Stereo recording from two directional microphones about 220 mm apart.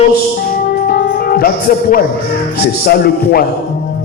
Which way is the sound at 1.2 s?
40° left (ahead or behind).